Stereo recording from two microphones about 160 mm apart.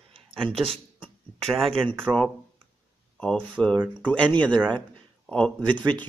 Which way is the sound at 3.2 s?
5° left (ahead or behind).